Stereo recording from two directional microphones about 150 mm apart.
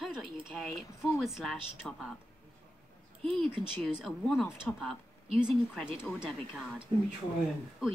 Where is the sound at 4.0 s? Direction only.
Centre (ahead or behind).